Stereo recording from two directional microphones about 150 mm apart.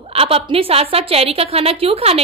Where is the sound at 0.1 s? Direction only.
40° right (ahead or behind).